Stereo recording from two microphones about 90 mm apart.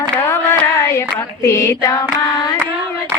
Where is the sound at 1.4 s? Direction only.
35° left (ahead or behind).